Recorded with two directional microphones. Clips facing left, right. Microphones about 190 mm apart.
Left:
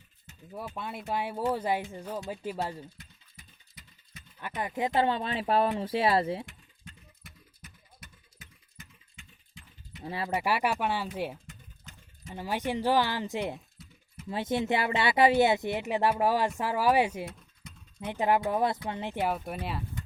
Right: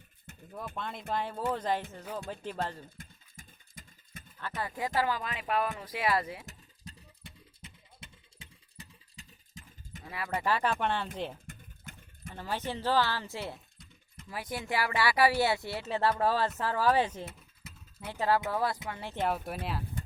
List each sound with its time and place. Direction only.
0.5 s speech: 10° left (ahead or behind)
3.0 s sewing machine: 50° right (ahead or behind)
4.4 s speech: 15° left (ahead or behind)
6.4 s a sound: 40° right (ahead or behind)
10.0 s speech: 30° left (ahead or behind)
10.3 s speech: 10° left (ahead or behind)
11.4 s a sound: 55° right (ahead or behind)
12.3 s speech: 15° left (ahead or behind)
13.8 s a sound: 5° left (ahead or behind)
14.3 s speech: 25° left (ahead or behind)
17.2 s a sound: 5° right (ahead or behind)
18.1 s speech: 20° left (ahead or behind)
19.2 s speech: centre (ahead or behind)